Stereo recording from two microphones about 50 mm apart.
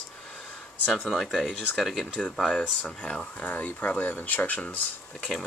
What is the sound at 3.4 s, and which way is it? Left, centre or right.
Speech, left.